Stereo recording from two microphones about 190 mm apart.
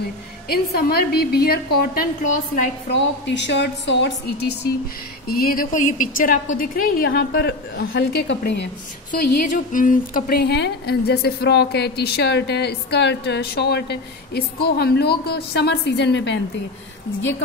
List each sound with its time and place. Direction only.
0.5 s a woman's voice: 55° left (ahead or behind)
2.9 s a woman's voice: 65° left (ahead or behind)
5.3 s a woman's voice: 50° left (ahead or behind)
9.2 s a woman's voice: 45° left (ahead or behind); by 16.3 s 70° left (ahead or behind)